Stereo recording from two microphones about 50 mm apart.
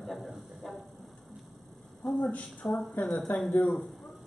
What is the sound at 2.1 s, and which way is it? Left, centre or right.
Speech, left.